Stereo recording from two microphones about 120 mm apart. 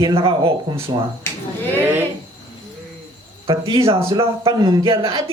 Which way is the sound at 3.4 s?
45° right (ahead or behind).